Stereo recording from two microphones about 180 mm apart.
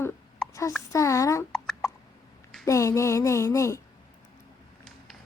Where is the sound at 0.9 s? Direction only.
15° left (ahead or behind).